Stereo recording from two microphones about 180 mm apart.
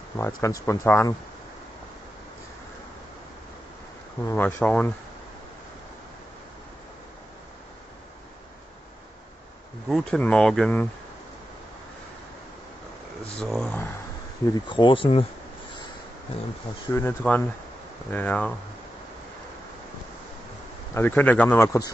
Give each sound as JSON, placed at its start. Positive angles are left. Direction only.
{"t": 0.2, "sound": "speech", "side_deg": 15}
{"t": 4.2, "sound": "speech", "side_deg": 15}
{"t": 9.8, "sound": "speech", "side_deg": 0}
{"t": 13.3, "sound": "speech", "side_deg": 5}
{"t": 14.5, "sound": "speech", "side_deg": 25}
{"t": 16.9, "sound": "speech", "side_deg": 10}
{"t": 20.9, "sound": "speech", "side_deg": 10}